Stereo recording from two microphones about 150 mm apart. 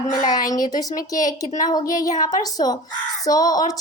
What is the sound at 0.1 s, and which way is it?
A woman's voice, 25° left (ahead or behind).